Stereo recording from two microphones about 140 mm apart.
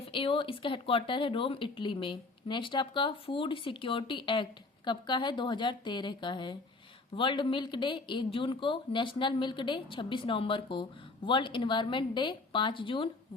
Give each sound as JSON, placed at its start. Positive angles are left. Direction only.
{"t": 0.0, "sound": "speech", "side_deg": 40}